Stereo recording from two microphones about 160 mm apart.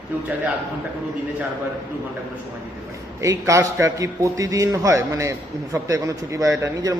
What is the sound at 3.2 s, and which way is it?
A man's voice, 20° right (ahead or behind).